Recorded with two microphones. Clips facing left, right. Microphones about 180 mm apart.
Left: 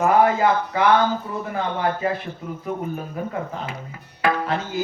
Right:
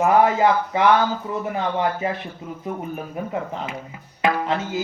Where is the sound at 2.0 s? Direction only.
20° right (ahead or behind).